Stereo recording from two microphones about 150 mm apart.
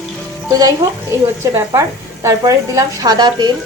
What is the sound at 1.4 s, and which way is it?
A woman's voice, 20° right (ahead or behind).